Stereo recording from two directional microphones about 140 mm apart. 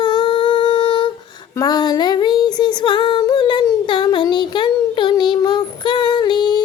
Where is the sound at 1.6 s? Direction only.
30° left (ahead or behind).